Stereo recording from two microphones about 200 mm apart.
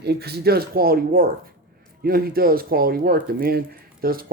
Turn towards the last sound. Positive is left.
turn(degrees=-45)  # may be behind; listen again after turning